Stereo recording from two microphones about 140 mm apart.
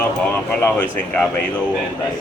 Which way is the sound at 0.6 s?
10° left (ahead or behind).